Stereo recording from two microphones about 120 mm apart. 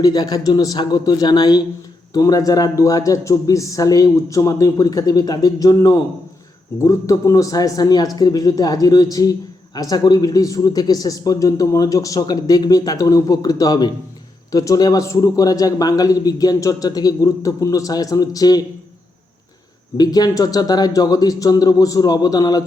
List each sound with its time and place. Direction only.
0.0 s a man's voice: 35° left (ahead or behind)
20.0 s a man's voice: 35° left (ahead or behind)